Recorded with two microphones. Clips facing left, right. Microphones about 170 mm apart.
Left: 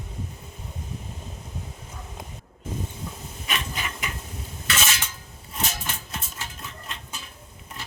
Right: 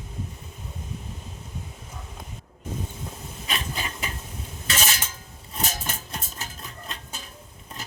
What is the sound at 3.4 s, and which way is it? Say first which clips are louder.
Wood: even; 35° right (ahead or behind).